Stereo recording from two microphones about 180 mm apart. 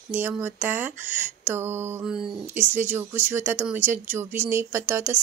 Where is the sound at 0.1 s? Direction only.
10° right (ahead or behind).